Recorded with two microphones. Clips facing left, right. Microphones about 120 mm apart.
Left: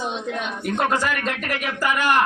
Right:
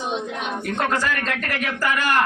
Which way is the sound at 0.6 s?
15° left (ahead or behind).